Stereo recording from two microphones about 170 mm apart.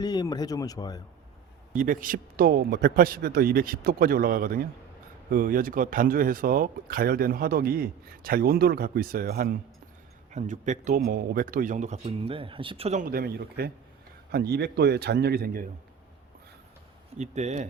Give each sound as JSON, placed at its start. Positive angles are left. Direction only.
{"t": 0.0, "sound": "speech", "side_deg": 25}
{"t": 1.7, "sound": "speech", "side_deg": -50}
{"t": 10.3, "sound": "a man's voice", "side_deg": -45}
{"t": 13.1, "sound": "speech", "side_deg": -60}
{"t": 17.2, "sound": "a man's voice", "side_deg": -40}